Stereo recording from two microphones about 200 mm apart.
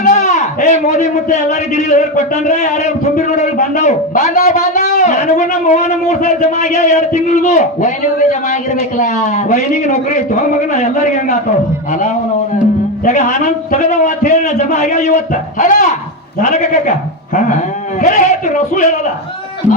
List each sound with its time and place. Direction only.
0.1 s a sound: 35° left (ahead or behind)
0.9 s a man's voice: 35° left (ahead or behind)
11.9 s a man's voice: 35° left (ahead or behind)
18.0 s a man's voice: 35° left (ahead or behind)